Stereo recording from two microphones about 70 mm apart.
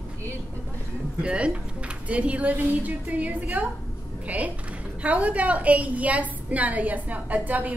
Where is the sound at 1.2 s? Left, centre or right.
Centre.